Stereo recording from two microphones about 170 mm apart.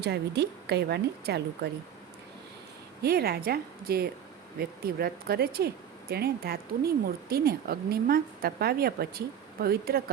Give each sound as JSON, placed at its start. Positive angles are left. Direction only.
{"t": 0.0, "sound": "a woman's voice", "side_deg": -75}
{"t": 3.0, "sound": "speech", "side_deg": -65}